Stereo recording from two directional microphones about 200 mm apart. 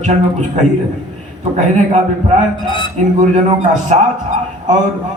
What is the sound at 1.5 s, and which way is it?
Speech, 35° right (ahead or behind).